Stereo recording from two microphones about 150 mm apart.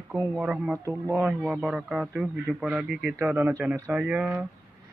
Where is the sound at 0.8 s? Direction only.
20° right (ahead or behind).